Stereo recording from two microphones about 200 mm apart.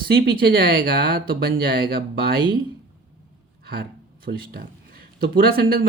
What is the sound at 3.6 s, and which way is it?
Speech, 50° right (ahead or behind).